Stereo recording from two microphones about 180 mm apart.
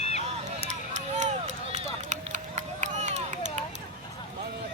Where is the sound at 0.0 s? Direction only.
35° left (ahead or behind).